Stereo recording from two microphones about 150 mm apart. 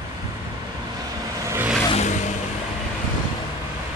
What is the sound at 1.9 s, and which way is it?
Vehicle, 50° left (ahead or behind).